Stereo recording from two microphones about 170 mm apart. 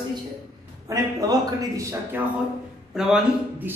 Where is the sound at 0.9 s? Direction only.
20° right (ahead or behind).